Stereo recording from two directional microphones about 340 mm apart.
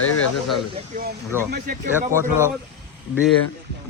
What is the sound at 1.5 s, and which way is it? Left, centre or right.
Speech, right.